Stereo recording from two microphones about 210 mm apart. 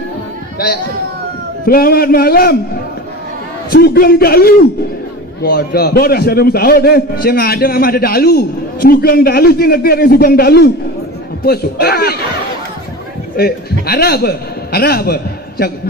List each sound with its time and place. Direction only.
1.7 s a man's voice: 45° left (ahead or behind)
3.7 s a man's voice: 50° left (ahead or behind)
13.4 s a man's voice: 50° left (ahead or behind)